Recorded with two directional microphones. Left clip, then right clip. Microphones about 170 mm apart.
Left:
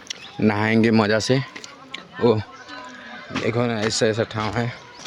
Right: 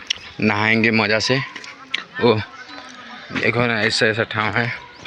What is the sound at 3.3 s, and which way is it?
A man's voice, 5° left (ahead or behind).